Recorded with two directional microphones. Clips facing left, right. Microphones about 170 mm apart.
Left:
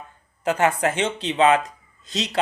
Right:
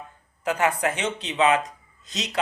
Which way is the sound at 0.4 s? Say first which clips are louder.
Left 3 dB; 30° left (ahead or behind).